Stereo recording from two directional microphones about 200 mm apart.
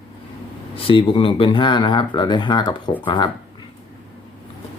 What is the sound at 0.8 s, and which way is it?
Speech, 25° left (ahead or behind).